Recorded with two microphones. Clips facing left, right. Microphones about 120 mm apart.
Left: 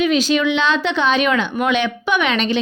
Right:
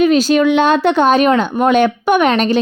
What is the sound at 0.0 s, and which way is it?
A woman's voice, 45° right (ahead or behind).